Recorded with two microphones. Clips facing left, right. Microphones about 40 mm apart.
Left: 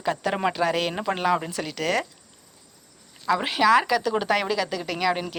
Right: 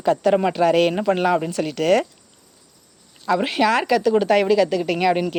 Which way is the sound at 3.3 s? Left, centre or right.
Centre.